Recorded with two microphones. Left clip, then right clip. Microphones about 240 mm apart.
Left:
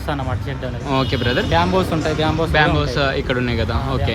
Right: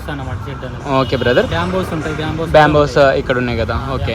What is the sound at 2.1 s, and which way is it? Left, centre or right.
Speech, left.